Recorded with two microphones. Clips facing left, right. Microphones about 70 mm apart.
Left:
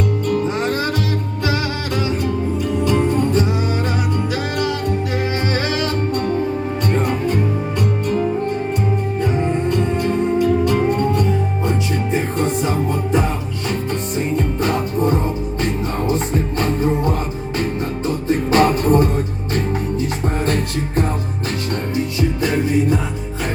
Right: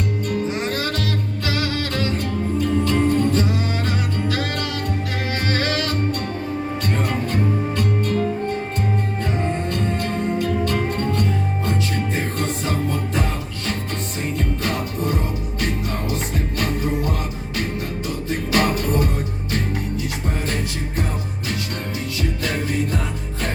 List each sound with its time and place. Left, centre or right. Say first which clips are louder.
0.7 s music: left 4 dB; left
9.2 s music: left 7 dB; centre
14.3 s music: left 4 dB; left
21.9 s music: left 7 dB; left